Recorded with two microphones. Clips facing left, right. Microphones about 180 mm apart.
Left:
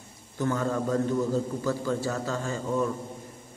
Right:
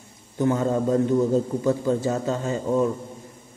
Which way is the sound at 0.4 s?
20° right (ahead or behind).